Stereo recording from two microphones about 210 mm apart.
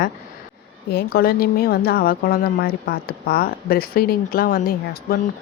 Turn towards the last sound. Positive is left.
turn(degrees=45)  # may be behind; listen again after turning